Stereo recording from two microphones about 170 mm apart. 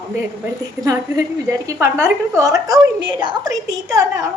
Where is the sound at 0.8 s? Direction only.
20° right (ahead or behind).